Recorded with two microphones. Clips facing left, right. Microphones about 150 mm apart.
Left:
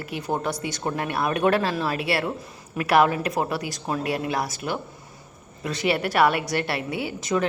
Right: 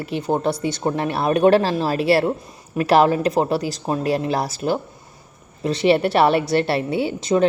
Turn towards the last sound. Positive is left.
turn(degrees=-25)  # may be behind; listen again after turning